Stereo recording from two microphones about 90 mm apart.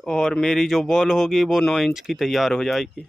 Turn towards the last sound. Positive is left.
turn(degrees=0)  # may be behind; listen again after turning